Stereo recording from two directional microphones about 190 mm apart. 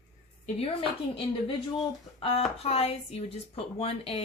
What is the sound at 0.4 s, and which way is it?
A woman's voice, 30° left (ahead or behind).